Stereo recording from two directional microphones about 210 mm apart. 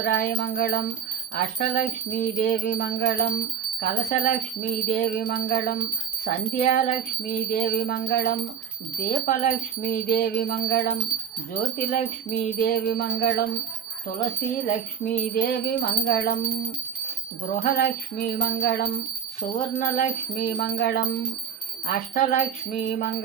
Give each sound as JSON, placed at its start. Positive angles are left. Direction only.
{"t": 0.0, "sound": "jingle bell", "side_deg": 45}
{"t": 1.4, "sound": "bell", "side_deg": 35}
{"t": 3.8, "sound": "jingle bell", "side_deg": 35}
{"t": 9.0, "sound": "jingle bell", "side_deg": 35}
{"t": 11.5, "sound": "jingle bell", "side_deg": 35}
{"t": 14.7, "sound": "bell", "side_deg": 40}
{"t": 15.8, "sound": "jingle bell", "side_deg": 50}
{"t": 17.5, "sound": "bell", "side_deg": 35}
{"t": 17.8, "sound": "jingle bell", "side_deg": 50}
{"t": 19.4, "sound": "jingle bell", "side_deg": 35}
{"t": 21.8, "sound": "bell", "side_deg": 40}